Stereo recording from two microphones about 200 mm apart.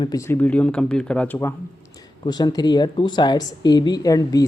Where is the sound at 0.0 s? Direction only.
15° left (ahead or behind).